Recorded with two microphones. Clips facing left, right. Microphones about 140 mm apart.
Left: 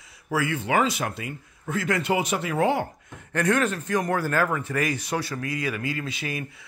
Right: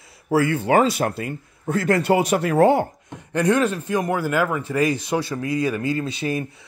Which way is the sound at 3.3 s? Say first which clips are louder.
Right 4 dB; 20° right (ahead or behind).